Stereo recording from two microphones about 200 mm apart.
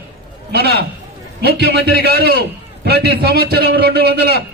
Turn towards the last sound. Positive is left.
turn(degrees=-55)  # may be behind; listen again after turning